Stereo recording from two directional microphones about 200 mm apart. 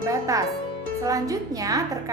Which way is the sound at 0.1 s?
15° right (ahead or behind).